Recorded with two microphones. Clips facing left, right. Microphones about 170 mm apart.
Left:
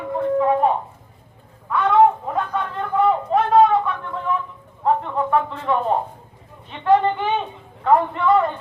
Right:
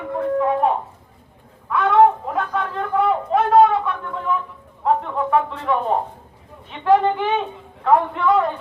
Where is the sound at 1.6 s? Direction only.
Centre (ahead or behind).